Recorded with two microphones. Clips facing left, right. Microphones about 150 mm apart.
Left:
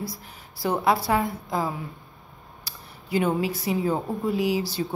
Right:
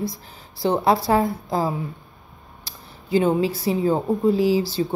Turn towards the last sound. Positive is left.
turn(degrees=-30)  # may be behind; listen again after turning